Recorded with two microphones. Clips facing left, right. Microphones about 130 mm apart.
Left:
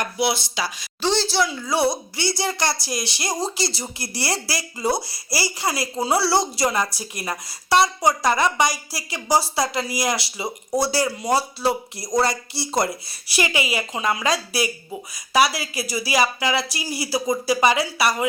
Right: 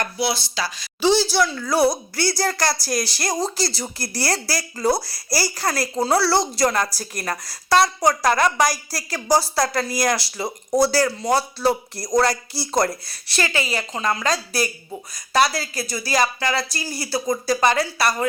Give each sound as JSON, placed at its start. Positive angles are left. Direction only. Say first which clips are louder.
{"t": 0.0, "sound": "speech", "louder": "left 1 dB", "side_deg": 20}
{"t": 1.0, "sound": "a woman's voice", "louder": "right 3 dB", "side_deg": -5}
{"t": 1.5, "sound": "a woman's voice", "louder": "right 2 dB", "side_deg": 10}